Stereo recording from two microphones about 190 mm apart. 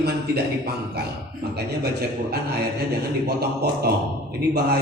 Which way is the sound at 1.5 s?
60° right (ahead or behind).